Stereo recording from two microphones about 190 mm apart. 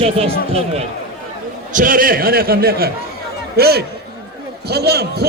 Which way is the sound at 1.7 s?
45° right (ahead or behind).